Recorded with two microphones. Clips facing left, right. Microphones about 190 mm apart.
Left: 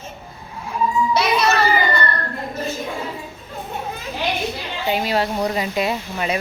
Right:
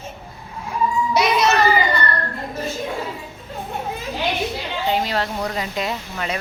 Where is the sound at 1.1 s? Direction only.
15° right (ahead or behind).